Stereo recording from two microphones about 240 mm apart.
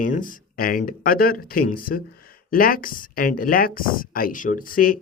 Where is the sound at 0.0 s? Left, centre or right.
Left.